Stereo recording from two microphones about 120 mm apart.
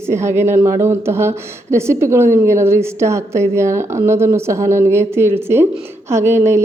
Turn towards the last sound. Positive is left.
turn(degrees=-20)  # may be behind; listen again after turning